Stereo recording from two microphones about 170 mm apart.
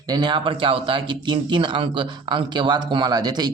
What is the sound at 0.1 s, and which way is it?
Speech, 25° right (ahead or behind).